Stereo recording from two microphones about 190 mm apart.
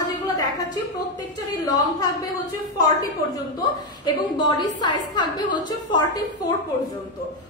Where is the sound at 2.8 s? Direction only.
20° left (ahead or behind).